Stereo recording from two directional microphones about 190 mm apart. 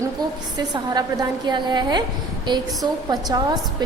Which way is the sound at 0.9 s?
20° right (ahead or behind).